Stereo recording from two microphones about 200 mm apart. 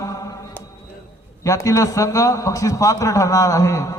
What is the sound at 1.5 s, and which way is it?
Speech, 15° left (ahead or behind).